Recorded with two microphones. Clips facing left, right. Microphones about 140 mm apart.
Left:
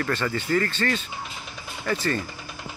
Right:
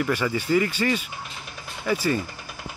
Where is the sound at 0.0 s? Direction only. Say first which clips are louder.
Right 2 dB; 10° right (ahead or behind).